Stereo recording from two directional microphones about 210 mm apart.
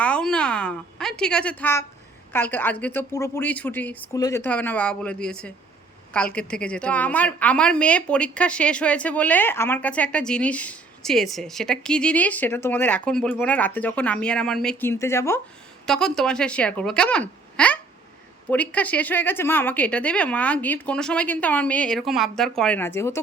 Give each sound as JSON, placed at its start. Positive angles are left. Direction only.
{"t": 0.0, "sound": "a woman's voice", "side_deg": 5}